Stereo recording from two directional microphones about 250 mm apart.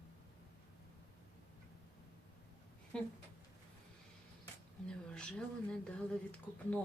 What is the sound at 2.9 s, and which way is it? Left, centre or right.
Speech, centre.